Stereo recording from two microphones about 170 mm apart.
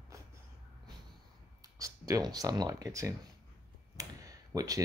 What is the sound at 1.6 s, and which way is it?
Speech, 20° right (ahead or behind).